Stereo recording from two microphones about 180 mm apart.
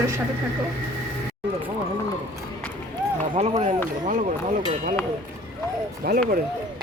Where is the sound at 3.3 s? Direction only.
35° right (ahead or behind).